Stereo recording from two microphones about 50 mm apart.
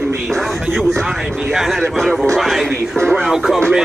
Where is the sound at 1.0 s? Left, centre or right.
Centre.